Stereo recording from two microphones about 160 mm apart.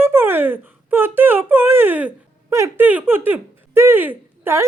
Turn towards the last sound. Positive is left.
turn(degrees=-15)  # may be behind; listen again after turning